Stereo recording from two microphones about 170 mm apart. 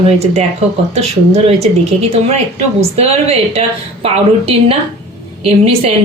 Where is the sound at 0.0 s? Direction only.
35° right (ahead or behind).